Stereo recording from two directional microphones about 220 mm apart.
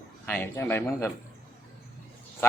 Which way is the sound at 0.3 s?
10° left (ahead or behind).